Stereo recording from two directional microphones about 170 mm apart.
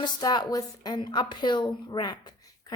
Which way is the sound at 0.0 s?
25° left (ahead or behind).